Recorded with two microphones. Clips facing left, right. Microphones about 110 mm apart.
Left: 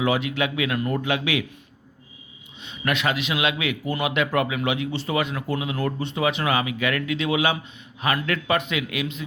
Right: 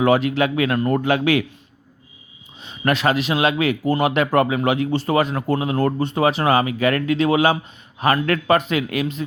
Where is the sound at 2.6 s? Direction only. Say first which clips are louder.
Right 5 dB; 40° right (ahead or behind).